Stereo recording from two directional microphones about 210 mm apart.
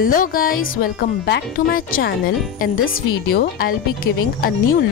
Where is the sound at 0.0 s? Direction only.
40° left (ahead or behind).